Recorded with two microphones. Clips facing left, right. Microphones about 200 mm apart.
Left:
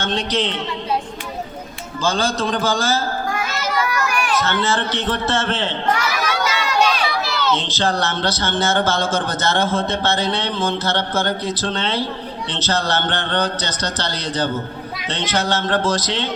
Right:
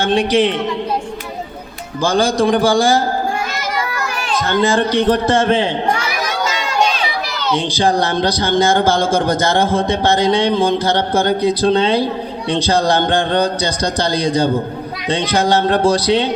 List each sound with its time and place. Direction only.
0.0 s speech: 10° right (ahead or behind)
2.0 s speech: 15° right (ahead or behind)
3.8 s children playing: 25° right (ahead or behind)
4.4 s speech: 15° right (ahead or behind)
7.4 s speech: 10° right (ahead or behind)